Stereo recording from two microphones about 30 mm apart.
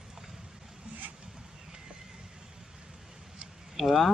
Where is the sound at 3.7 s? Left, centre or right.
Centre.